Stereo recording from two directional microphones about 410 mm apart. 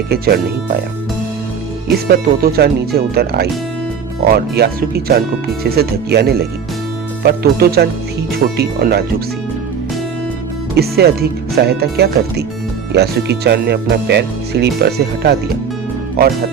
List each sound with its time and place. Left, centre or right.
0.1 s speech: right
2.0 s speech: right
10.8 s speech: right